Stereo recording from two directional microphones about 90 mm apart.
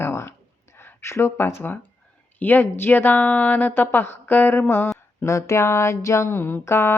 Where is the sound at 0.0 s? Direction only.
30° left (ahead or behind).